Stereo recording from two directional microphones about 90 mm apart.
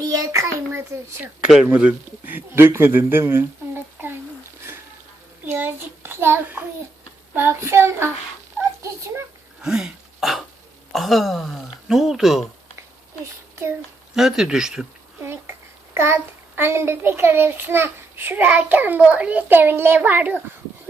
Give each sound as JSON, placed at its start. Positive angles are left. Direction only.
{"t": 0.0, "sound": "a child's voice", "side_deg": -40}
{"t": 1.6, "sound": "a child's voice", "side_deg": -15}
{"t": 3.1, "sound": "a sound", "side_deg": -25}
{"t": 5.5, "sound": "a child's voice", "side_deg": -25}
{"t": 8.8, "sound": "a sound", "side_deg": -30}
{"t": 9.6, "sound": "throat clearing", "side_deg": -5}
{"t": 10.9, "sound": "speech", "side_deg": 0}
{"t": 14.2, "sound": "speech", "side_deg": -5}
{"t": 15.2, "sound": "a sound", "side_deg": -25}
{"t": 16.0, "sound": "a child's voice", "side_deg": -30}